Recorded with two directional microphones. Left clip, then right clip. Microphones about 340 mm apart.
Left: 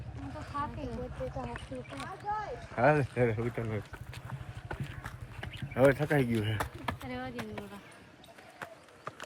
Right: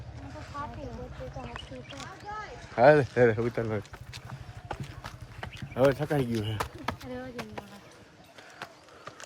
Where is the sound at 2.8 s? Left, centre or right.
Centre.